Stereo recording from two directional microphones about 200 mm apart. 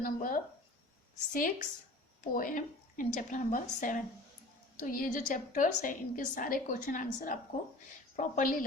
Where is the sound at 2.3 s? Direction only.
40° left (ahead or behind).